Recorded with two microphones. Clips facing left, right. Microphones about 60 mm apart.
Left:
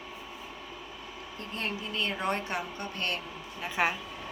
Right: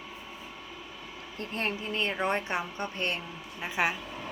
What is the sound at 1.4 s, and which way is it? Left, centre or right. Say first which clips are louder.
A woman's voice: right 3 dB; right.